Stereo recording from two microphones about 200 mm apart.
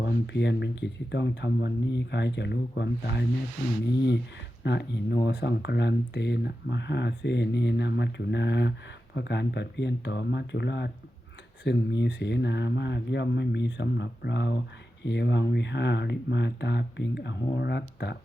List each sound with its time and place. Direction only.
0.0 s speech: 60° left (ahead or behind)
4.6 s speech: 60° left (ahead or behind)